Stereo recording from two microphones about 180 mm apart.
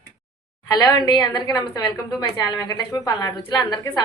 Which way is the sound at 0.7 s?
20° left (ahead or behind).